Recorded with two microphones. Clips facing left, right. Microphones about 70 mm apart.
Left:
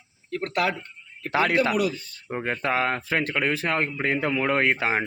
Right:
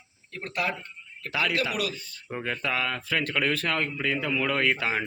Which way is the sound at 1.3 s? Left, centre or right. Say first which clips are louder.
Left 6 dB; left.